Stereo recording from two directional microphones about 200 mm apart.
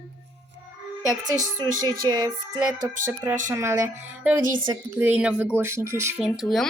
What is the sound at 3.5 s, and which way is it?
A woman's voice, 15° right (ahead or behind).